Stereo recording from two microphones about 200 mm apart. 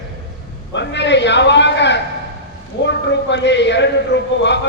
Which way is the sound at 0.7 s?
60° left (ahead or behind).